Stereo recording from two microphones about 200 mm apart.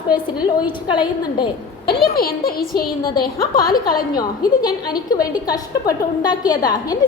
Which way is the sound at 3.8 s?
20° left (ahead or behind).